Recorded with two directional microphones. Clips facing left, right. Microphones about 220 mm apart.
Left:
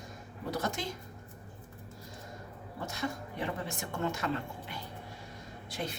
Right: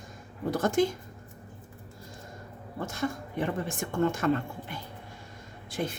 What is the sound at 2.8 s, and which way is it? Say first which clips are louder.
Speech: right 5 dB; 50° right (ahead or behind).